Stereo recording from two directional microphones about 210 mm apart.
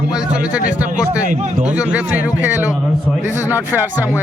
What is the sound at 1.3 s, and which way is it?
Speech, 35° right (ahead or behind).